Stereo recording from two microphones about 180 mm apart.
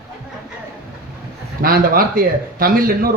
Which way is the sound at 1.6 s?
55° right (ahead or behind).